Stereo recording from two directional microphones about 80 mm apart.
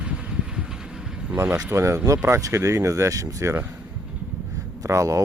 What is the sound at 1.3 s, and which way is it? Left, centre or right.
Speech, right.